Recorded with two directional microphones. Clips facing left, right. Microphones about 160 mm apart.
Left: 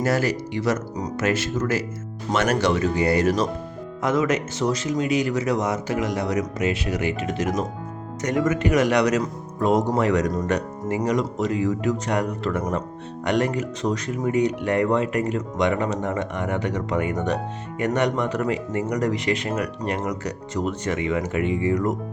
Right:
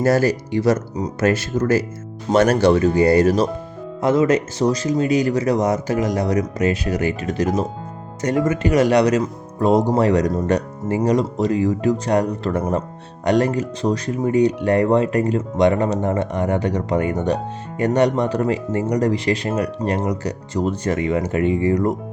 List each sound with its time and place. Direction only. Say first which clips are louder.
0.0 s speech: right 5 dB; 40° right (ahead or behind)